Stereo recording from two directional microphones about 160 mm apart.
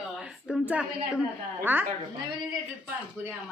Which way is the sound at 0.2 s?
5° right (ahead or behind).